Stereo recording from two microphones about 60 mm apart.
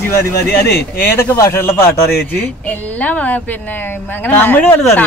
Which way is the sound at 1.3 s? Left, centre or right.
Left.